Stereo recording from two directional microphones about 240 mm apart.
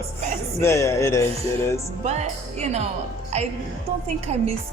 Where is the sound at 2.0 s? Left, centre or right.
Right.